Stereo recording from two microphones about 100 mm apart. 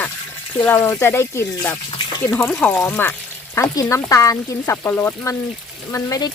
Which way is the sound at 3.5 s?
35° left (ahead or behind).